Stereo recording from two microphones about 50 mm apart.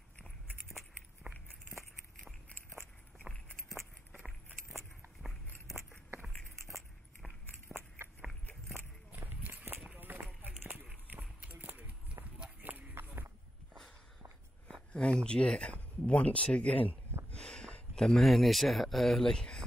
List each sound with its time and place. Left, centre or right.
6.7 s a sound: centre
7.7 s biting: centre
9.1 s walk: right
9.9 s run: right
11.1 s clip-clop: right
12.6 s a sound: right
14.9 s speech: left
17.3 s a sound: left
18.2 s speech: centre